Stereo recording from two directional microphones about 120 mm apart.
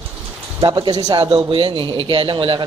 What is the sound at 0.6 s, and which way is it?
Speech, 35° right (ahead or behind).